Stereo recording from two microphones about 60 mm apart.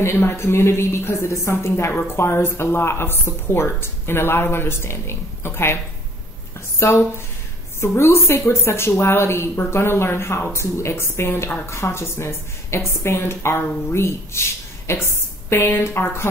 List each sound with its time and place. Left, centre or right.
0.0 s a woman's voice: left
6.8 s a woman's voice: left